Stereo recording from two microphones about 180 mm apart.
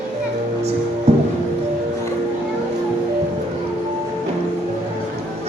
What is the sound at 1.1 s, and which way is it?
Music, 35° right (ahead or behind).